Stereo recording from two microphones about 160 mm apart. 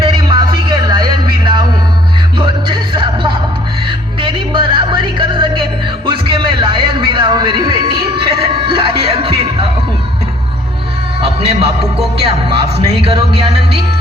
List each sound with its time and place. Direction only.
0.0 s music: 30° right (ahead or behind)
6.1 s a sound: 30° right (ahead or behind)
8.1 s music: 35° right (ahead or behind)
11.2 s music: 35° right (ahead or behind)